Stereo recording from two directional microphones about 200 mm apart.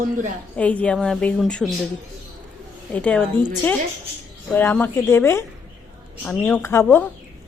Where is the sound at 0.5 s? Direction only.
5° left (ahead or behind).